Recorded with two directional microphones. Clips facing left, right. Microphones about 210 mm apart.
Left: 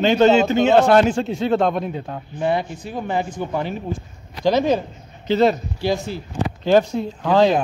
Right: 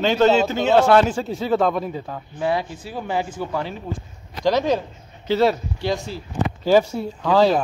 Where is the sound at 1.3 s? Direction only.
5° right (ahead or behind).